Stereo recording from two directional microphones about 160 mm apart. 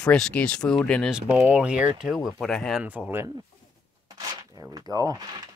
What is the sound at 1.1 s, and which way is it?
Speech, 5° right (ahead or behind).